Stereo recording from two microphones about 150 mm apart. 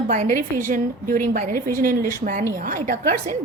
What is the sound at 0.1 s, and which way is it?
A woman's voice, 60° right (ahead or behind).